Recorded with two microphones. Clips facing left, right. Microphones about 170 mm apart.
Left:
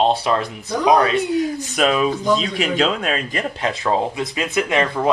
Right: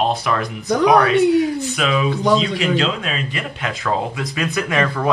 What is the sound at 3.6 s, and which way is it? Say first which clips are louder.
Speech: left 2 dB; 30° left (ahead or behind).